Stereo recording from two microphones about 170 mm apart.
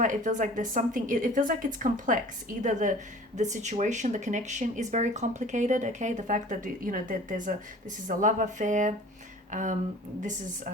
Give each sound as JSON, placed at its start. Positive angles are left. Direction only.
{"t": 0.0, "sound": "speech", "side_deg": -50}